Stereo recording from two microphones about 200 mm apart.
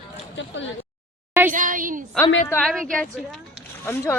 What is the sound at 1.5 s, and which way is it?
Speech, 40° right (ahead or behind).